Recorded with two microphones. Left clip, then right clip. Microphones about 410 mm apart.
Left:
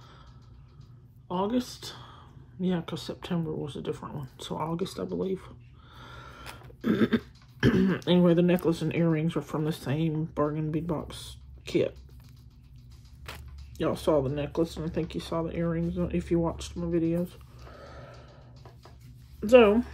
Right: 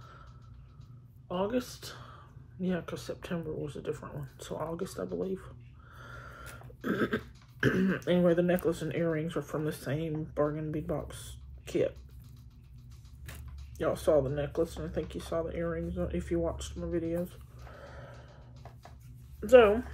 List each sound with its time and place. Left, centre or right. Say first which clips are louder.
1.3 s speech: left 3 dB; centre
5.9 s a sound: left 1 dB; left
7.6 s speech: left 3 dB; left
13.2 s speech: left 7 dB; centre
17.7 s a sound: left 2 dB; left
19.4 s speech: left 2 dB; left